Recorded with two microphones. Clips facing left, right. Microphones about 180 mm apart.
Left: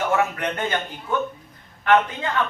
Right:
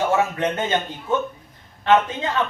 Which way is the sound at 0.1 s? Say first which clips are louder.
Right 2 dB; 25° right (ahead or behind).